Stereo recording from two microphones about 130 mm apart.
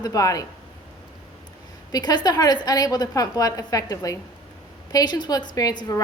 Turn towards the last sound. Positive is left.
turn(degrees=30)  # may be behind; listen again after turning